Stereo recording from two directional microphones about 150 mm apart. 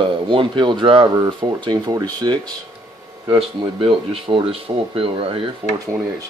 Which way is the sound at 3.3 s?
40° right (ahead or behind).